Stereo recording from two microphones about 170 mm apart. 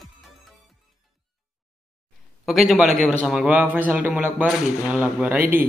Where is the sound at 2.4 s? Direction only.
Centre (ahead or behind).